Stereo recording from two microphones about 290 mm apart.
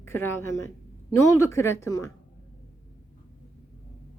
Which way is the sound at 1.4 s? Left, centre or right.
Centre.